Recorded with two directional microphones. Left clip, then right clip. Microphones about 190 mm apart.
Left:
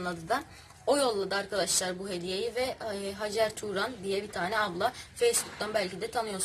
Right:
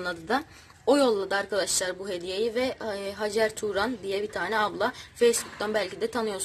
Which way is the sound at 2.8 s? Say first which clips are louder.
Right 4 dB; 50° right (ahead or behind).